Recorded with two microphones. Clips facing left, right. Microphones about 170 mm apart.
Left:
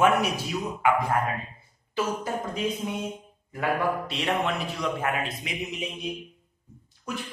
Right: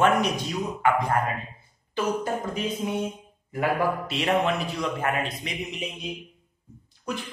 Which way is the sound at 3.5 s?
Centre (ahead or behind).